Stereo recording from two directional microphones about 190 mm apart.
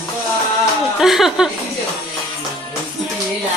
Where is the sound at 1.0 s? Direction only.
Centre (ahead or behind).